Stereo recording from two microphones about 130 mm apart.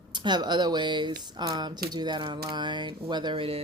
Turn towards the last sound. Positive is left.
turn(degrees=-45)  # may be behind; listen again after turning